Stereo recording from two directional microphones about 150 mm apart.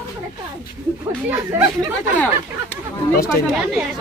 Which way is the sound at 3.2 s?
5° right (ahead or behind).